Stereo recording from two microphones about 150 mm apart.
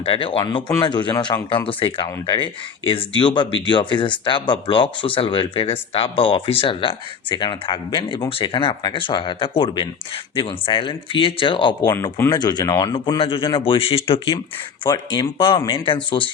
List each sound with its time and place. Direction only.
0.0 s speech: 35° left (ahead or behind)
11.9 s speech: 15° left (ahead or behind)
12.3 s speech: 25° left (ahead or behind)
12.9 s speech: 35° left (ahead or behind)